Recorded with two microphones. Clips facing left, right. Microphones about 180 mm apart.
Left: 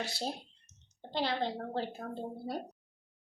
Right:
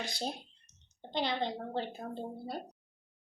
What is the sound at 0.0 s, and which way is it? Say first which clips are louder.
Speech: left 1 dB; 5° left (ahead or behind).